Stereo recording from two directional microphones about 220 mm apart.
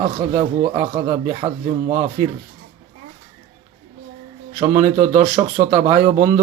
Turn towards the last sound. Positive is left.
turn(degrees=-25)  # may be behind; listen again after turning